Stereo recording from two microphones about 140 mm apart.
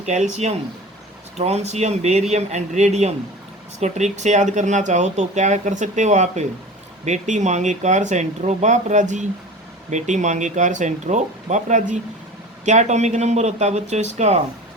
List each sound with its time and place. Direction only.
0.0 s speech: 55° right (ahead or behind)